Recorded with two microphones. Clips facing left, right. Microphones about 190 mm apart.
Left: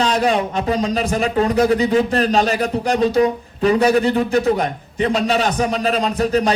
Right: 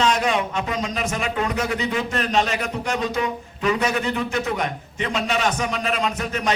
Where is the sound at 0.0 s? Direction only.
35° left (ahead or behind).